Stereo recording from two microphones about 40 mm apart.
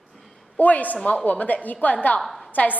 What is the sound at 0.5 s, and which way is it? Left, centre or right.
A woman's voice, left.